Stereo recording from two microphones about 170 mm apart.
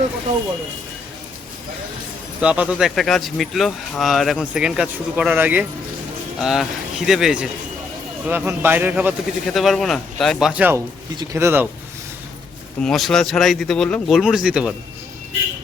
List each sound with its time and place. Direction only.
2.4 s speech: 5° right (ahead or behind)
12.8 s speech: centre (ahead or behind)